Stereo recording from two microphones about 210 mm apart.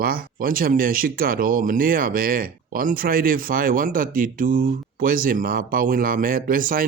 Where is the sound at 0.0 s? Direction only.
45° right (ahead or behind).